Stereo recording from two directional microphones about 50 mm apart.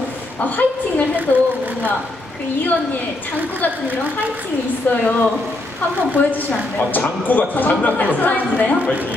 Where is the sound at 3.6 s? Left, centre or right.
Left.